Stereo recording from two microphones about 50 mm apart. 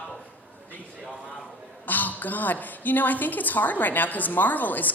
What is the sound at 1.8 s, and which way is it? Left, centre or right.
A woman's voice, left.